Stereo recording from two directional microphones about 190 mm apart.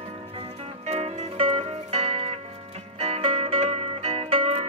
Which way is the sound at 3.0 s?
35° right (ahead or behind).